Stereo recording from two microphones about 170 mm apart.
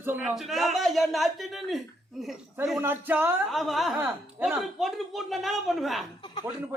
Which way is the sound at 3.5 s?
Centre (ahead or behind).